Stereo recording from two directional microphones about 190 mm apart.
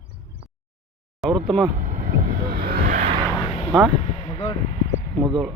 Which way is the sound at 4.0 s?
35° left (ahead or behind).